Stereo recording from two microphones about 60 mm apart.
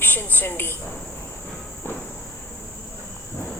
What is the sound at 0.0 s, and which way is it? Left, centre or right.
Speech, left.